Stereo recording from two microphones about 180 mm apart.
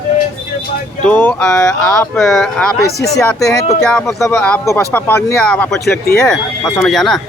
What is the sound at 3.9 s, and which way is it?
Speech, 10° left (ahead or behind).